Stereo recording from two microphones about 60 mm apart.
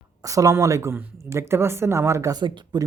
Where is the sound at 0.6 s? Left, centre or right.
Right.